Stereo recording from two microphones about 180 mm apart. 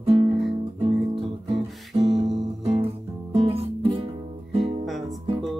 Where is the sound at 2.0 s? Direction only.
35° right (ahead or behind).